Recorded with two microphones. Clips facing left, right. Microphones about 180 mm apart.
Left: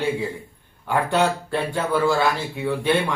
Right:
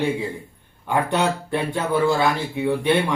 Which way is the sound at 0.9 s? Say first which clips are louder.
Even; 20° right (ahead or behind).